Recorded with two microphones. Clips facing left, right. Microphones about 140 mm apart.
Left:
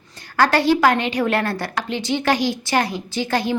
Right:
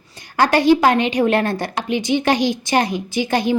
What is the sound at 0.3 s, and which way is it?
A woman's voice, 15° right (ahead or behind).